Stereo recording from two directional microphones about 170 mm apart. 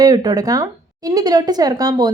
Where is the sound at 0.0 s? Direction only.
20° right (ahead or behind).